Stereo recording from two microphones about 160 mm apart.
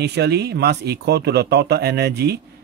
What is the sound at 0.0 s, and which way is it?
Speech, 90° right.